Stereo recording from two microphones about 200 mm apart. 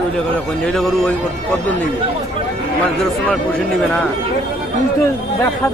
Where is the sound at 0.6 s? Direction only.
Centre (ahead or behind).